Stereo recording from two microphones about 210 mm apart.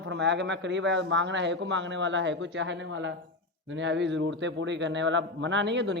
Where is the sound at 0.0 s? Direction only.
60° right (ahead or behind).